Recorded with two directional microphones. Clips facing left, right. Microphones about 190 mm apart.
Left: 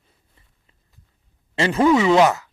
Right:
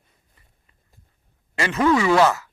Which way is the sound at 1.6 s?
30° left (ahead or behind).